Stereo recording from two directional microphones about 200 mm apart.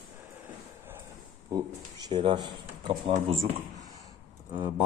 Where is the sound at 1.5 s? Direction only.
20° right (ahead or behind).